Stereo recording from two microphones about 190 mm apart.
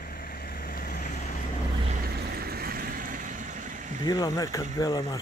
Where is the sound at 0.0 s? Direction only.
50° left (ahead or behind).